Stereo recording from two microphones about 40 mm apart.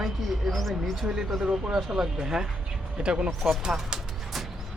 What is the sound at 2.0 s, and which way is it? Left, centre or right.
Speech, centre.